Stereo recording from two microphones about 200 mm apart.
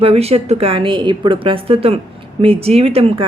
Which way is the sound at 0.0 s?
30° right (ahead or behind).